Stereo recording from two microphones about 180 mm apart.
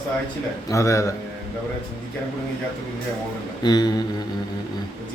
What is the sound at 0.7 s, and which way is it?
Mantra, 15° left (ahead or behind).